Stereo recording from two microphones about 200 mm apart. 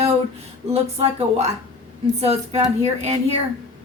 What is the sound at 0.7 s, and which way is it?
Speech, 30° right (ahead or behind).